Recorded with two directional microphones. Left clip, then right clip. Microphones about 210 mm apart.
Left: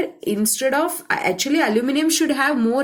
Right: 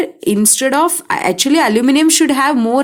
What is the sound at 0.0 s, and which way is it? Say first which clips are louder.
Speech: right 7 dB; 45° right (ahead or behind).